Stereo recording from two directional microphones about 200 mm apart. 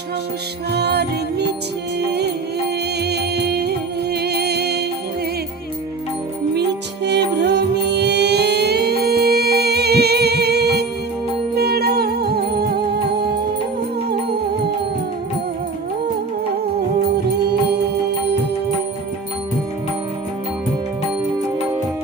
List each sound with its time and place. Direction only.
0.7 s music: 55° right (ahead or behind)
7.0 s music: 60° right (ahead or behind)